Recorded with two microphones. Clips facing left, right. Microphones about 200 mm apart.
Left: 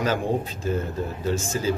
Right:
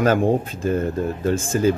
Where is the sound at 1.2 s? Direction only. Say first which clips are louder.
Right 6 dB; 55° right (ahead or behind).